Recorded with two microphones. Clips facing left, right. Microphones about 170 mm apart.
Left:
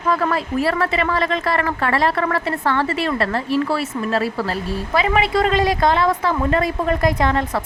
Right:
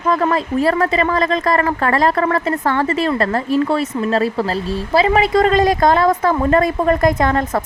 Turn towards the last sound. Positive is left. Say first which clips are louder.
# right 3 dB
turn(degrees=-45)  # may be behind; listen again after turning